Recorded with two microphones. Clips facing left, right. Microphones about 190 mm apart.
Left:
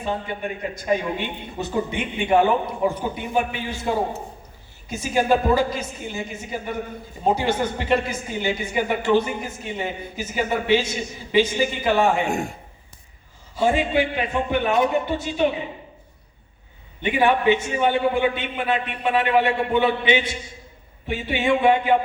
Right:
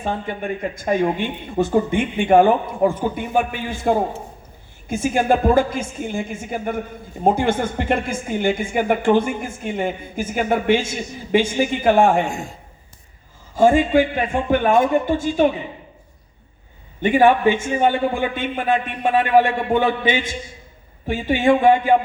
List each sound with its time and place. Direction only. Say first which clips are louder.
0.0 s a woman's voice: right 2 dB; 50° right (ahead or behind)
12.3 s a man's voice: left 4 dB; 60° left (ahead or behind)
13.5 s a woman's voice: right 6 dB; 45° right (ahead or behind)
17.0 s a woman's voice: right 5 dB; 45° right (ahead or behind)